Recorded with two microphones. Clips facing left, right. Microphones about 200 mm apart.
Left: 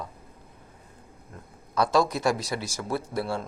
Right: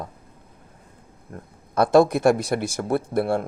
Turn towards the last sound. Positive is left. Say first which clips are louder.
# right 7 dB
turn(degrees=-55)  # may be behind; listen again after turning